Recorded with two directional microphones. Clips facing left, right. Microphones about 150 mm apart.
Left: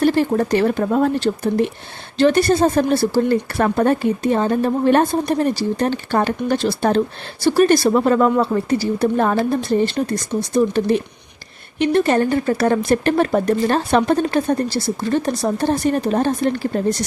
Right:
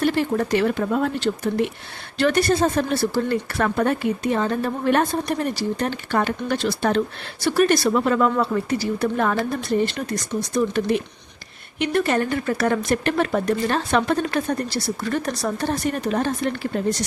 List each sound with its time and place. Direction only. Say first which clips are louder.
0.0 s speech: left 5 dB; 40° left (ahead or behind)